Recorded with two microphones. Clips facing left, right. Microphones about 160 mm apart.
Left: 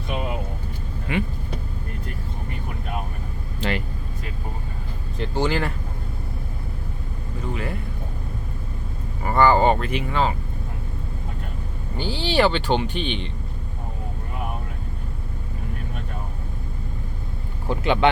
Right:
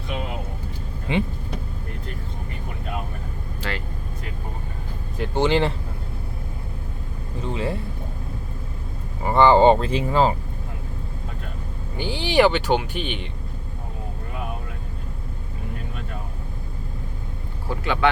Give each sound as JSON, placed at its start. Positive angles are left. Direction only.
{"t": 1.1, "sound": "speech", "side_deg": -25}
{"t": 3.6, "sound": "vehicle", "side_deg": 20}
{"t": 5.3, "sound": "speech", "side_deg": -20}
{"t": 7.4, "sound": "a sound", "side_deg": -30}
{"t": 9.2, "sound": "a sound", "side_deg": -20}
{"t": 11.9, "sound": "speech", "side_deg": -15}
{"t": 17.7, "sound": "speech", "side_deg": 20}